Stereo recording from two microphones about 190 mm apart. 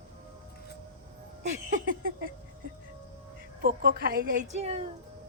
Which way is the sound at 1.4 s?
40° right (ahead or behind).